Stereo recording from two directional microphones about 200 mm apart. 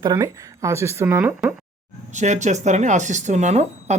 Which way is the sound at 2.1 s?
35° right (ahead or behind).